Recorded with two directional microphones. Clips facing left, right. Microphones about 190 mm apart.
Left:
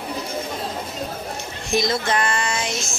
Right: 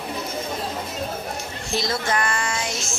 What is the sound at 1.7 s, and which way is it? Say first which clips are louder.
Music: left 3 dB; 20° left (ahead or behind).